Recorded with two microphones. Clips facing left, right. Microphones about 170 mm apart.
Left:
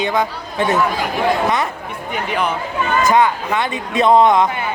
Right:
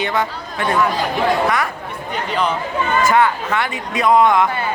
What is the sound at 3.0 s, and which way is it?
Speech, 20° left (ahead or behind).